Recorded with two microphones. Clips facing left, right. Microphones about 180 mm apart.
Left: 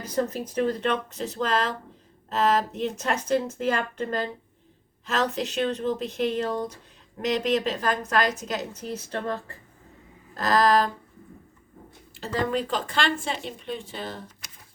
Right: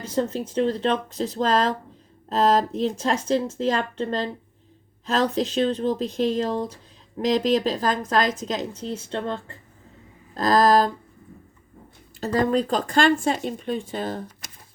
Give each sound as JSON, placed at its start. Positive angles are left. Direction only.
{"t": 0.0, "sound": "speech", "side_deg": -30}
{"t": 10.3, "sound": "speech", "side_deg": -40}
{"t": 12.2, "sound": "speech", "side_deg": -40}